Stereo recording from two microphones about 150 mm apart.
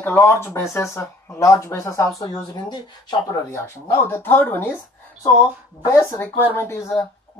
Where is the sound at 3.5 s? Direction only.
15° left (ahead or behind).